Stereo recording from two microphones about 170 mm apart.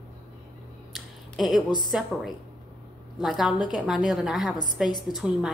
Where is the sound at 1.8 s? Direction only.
Centre (ahead or behind).